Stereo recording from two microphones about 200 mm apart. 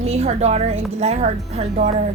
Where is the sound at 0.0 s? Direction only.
35° right (ahead or behind).